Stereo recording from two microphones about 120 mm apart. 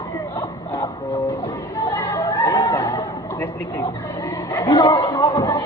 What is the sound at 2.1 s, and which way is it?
Chatter, 20° left (ahead or behind).